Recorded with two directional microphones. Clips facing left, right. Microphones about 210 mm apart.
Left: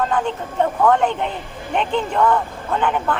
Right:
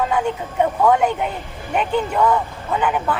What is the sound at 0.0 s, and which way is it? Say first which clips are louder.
Speech: right 1 dB; 10° right (ahead or behind).